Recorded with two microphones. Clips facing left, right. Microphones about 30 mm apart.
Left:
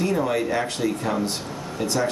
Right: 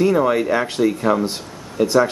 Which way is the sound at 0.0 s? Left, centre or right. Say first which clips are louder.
Right 6 dB; centre.